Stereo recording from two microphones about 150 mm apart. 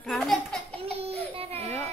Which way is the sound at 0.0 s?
Centre (ahead or behind).